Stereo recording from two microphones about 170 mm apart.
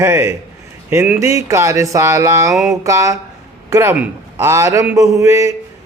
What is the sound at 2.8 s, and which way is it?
A man's voice, 20° right (ahead or behind).